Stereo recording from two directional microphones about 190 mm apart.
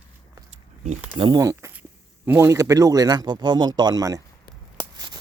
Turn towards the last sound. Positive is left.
turn(degrees=-20)  # may be behind; listen again after turning